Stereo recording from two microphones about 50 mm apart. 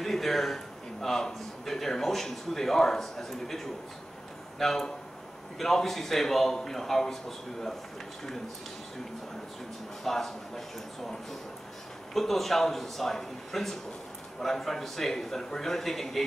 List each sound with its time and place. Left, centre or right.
0.0 s a man's voice: centre
10.0 s a man's voice: centre
12.1 s a man's voice: centre